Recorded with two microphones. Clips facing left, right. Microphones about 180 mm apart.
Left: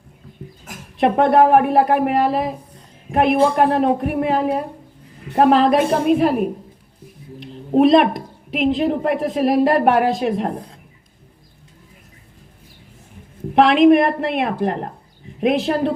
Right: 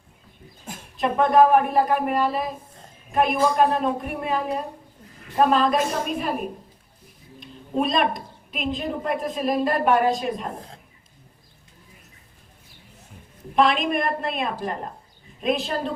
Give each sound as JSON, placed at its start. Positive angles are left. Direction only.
{"t": 0.9, "sound": "speech", "side_deg": 65}
{"t": 7.4, "sound": "a woman's voice", "side_deg": 70}
{"t": 13.6, "sound": "speech", "side_deg": 65}